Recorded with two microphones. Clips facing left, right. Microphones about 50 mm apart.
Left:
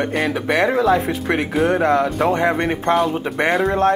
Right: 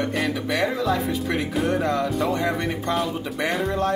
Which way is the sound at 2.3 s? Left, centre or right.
Left.